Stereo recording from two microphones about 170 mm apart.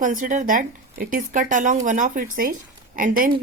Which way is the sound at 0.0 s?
50° right (ahead or behind).